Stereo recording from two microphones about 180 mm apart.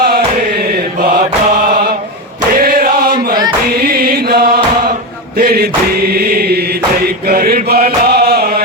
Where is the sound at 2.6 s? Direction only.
55° right (ahead or behind).